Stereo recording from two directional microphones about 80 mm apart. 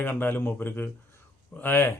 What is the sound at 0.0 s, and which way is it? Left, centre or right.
Speech, left.